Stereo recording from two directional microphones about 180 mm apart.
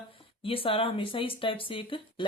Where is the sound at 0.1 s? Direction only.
30° left (ahead or behind).